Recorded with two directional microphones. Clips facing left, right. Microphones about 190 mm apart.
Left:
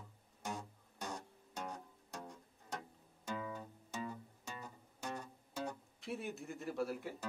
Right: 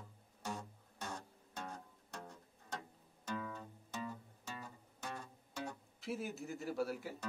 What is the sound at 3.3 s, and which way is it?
Music, 10° left (ahead or behind).